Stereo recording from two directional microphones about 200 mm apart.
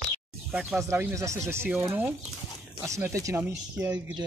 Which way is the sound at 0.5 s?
5° right (ahead or behind).